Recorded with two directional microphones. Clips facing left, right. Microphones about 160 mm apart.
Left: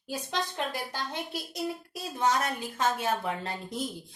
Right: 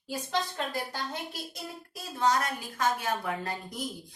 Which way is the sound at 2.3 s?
25° left (ahead or behind).